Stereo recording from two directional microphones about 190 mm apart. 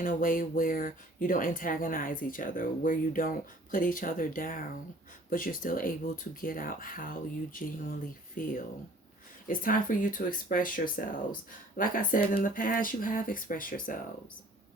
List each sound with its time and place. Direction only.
0.0 s speech: 45° left (ahead or behind)